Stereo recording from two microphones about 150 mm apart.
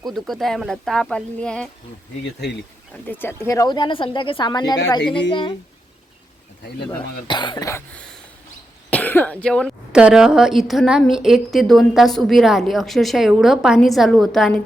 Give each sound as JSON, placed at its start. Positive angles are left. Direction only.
{"t": 0.0, "sound": "a woman's voice", "side_deg": 0}
{"t": 3.1, "sound": "speech", "side_deg": 15}
{"t": 7.3, "sound": "speech", "side_deg": 30}
{"t": 8.9, "sound": "a woman's voice", "side_deg": 10}